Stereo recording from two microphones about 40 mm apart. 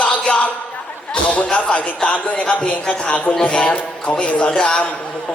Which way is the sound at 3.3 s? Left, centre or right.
Left.